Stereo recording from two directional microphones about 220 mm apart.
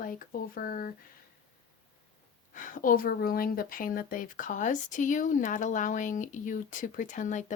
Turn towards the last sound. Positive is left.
turn(degrees=35)  # may be behind; listen again after turning